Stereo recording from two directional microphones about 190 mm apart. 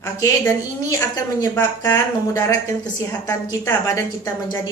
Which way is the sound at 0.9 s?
20° left (ahead or behind).